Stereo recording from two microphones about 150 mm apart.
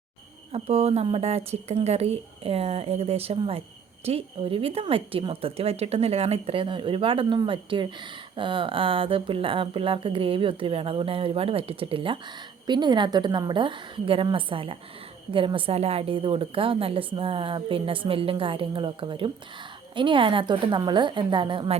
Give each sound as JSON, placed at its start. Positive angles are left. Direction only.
{"t": 0.5, "sound": "a woman's voice", "side_deg": -40}